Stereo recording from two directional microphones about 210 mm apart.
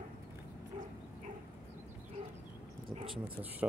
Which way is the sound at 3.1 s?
5° right (ahead or behind).